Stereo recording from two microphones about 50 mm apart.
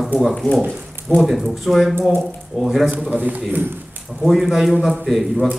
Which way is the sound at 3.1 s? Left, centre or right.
Right.